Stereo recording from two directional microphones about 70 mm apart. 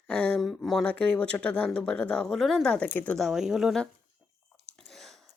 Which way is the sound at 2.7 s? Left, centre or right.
Centre.